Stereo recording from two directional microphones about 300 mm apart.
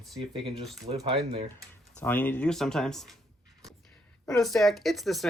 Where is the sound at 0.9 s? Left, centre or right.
Centre.